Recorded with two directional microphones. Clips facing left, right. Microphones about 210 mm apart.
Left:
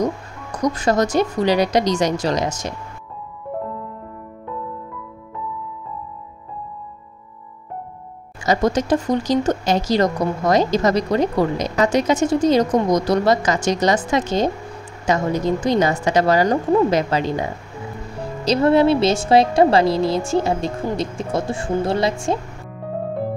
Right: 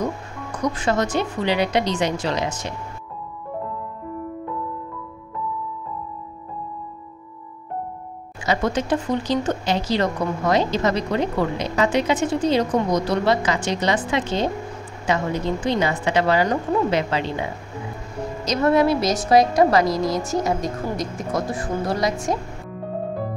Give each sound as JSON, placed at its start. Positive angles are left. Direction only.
{"t": 0.6, "sound": "speech", "side_deg": 40}
{"t": 8.5, "sound": "speech", "side_deg": 40}
{"t": 18.4, "sound": "speech", "side_deg": 30}